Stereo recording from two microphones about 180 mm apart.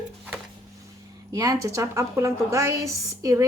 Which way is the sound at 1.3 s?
20° right (ahead or behind).